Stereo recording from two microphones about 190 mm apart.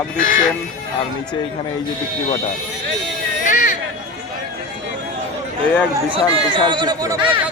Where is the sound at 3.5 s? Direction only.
45° left (ahead or behind).